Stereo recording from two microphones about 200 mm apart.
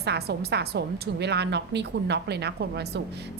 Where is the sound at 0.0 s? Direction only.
55° right (ahead or behind).